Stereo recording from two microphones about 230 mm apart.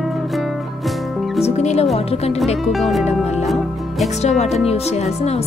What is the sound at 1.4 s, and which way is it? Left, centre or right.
Music, left.